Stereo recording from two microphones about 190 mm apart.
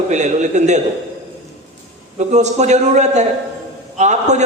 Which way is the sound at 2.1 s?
35° right (ahead or behind).